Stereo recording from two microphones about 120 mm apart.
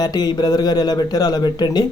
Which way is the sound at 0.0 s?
35° left (ahead or behind).